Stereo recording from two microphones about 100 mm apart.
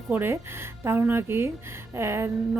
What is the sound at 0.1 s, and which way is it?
A woman's voice, 20° right (ahead or behind).